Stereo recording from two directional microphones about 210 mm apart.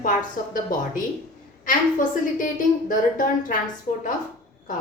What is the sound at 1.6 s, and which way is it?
A woman's voice, 40° left (ahead or behind).